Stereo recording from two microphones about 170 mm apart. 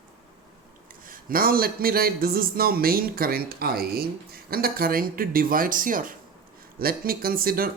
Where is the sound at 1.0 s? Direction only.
55° right (ahead or behind).